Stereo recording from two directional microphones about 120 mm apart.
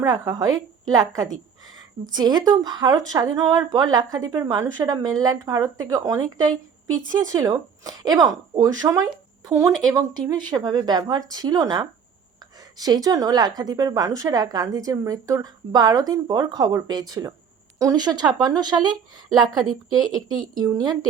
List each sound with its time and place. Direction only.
0.0 s a woman's voice: 30° right (ahead or behind)
19.5 s a woman's voice: centre (ahead or behind)
20.2 s a woman's voice: 35° right (ahead or behind)